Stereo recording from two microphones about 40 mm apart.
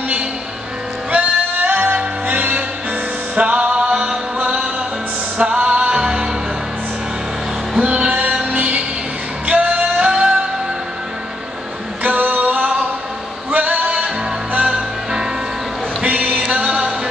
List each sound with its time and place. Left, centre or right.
1.6 s music: right
6.0 s music: centre
7.7 s music: right
10.0 s music: right
12.0 s music: right
13.9 s music: right
16.0 s music: right